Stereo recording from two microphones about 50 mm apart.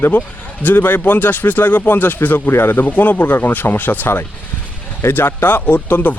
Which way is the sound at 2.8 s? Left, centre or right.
Left.